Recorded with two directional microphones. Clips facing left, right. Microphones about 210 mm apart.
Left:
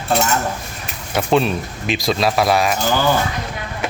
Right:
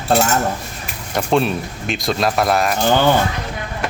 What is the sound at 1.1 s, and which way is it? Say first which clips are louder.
Speech: even; centre (ahead or behind).